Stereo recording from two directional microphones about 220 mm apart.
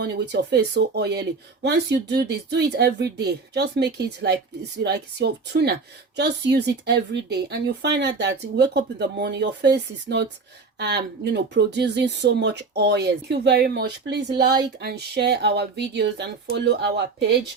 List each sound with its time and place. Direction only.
0.0 s speech: 50° right (ahead or behind)